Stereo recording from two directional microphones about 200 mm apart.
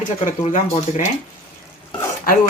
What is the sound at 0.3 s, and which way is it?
Speech, 40° left (ahead or behind).